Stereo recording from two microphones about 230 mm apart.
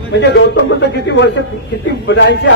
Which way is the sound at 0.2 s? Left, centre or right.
Left.